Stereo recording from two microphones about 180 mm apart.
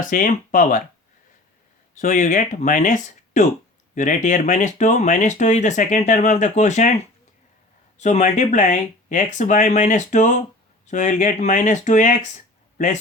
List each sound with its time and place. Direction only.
0.1 s speech: 50° left (ahead or behind)
2.0 s speech: 45° left (ahead or behind)